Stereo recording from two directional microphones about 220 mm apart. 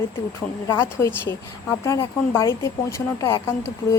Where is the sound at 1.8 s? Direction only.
15° left (ahead or behind).